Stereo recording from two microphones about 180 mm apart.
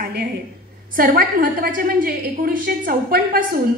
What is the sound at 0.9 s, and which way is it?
A woman's voice, 55° right (ahead or behind).